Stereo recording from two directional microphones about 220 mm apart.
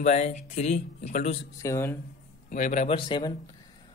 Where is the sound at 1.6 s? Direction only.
10° left (ahead or behind).